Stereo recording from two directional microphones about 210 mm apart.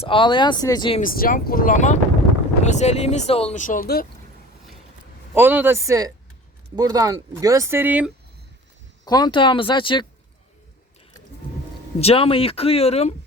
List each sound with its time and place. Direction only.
0.0 s speech: 25° left (ahead or behind)
1.0 s speech: 40° left (ahead or behind)
5.3 s speech: 10° right (ahead or behind)
9.0 s speech: 20° left (ahead or behind)
11.9 s speech: 25° left (ahead or behind)